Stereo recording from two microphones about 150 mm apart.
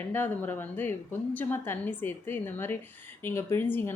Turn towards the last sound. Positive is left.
turn(degrees=15)  # may be behind; listen again after turning